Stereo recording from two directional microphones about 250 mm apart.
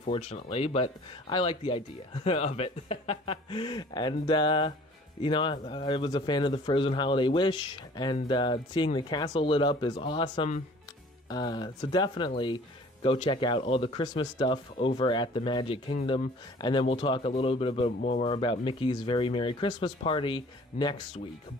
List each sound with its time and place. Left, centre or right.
0.0 s speech: left